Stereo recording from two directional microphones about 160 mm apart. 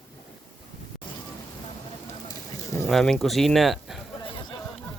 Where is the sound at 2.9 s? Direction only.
Centre (ahead or behind).